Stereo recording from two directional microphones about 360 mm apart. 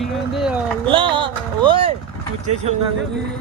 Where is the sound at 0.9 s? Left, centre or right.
Centre.